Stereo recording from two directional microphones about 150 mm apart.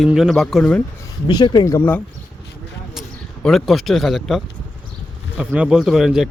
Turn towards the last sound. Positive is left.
turn(degrees=-5)  # may be behind; listen again after turning